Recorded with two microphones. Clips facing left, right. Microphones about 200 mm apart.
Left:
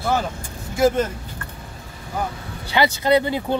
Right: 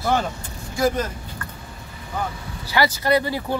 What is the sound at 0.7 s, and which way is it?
Speech, 25° left (ahead or behind).